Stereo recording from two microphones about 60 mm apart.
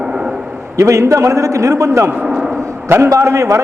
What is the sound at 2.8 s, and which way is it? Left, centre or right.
Speech, right.